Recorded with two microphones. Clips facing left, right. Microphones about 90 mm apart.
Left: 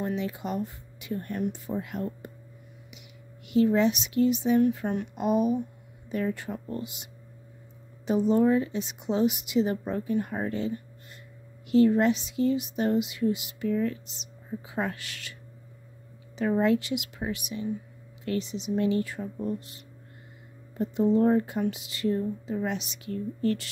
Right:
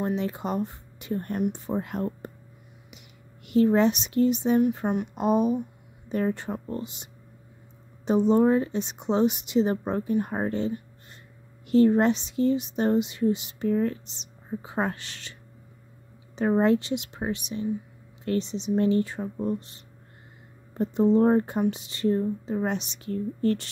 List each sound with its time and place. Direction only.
0.0 s speech: 35° right (ahead or behind)
3.4 s speech: 45° right (ahead or behind)
11.7 s speech: 35° right (ahead or behind)
16.3 s speech: 35° right (ahead or behind)